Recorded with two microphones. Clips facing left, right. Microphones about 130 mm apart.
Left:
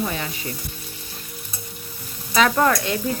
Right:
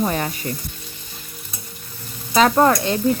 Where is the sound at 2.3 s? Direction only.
35° right (ahead or behind).